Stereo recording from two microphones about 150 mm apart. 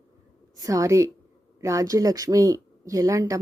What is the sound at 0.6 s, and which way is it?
Speech, 20° right (ahead or behind).